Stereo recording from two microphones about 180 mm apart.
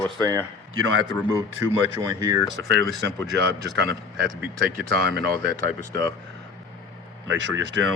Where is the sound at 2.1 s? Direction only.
20° right (ahead or behind).